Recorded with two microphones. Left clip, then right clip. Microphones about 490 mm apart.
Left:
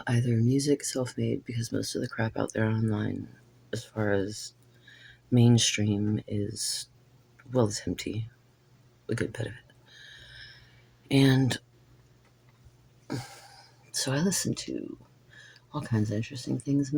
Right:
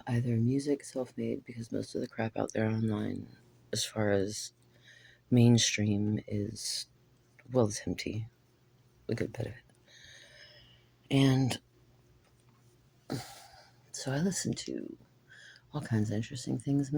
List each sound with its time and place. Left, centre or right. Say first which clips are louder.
0.0 s speech: left 4 dB; right
10.2 s a sound: left 6 dB; right
11.1 s speech: left 4 dB; right
13.9 s speech: left 6 dB; right